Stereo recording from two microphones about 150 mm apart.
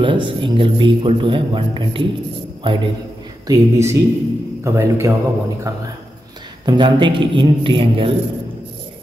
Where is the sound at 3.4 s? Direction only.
20° right (ahead or behind).